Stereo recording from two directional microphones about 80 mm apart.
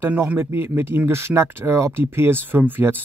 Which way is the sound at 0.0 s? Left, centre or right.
Right.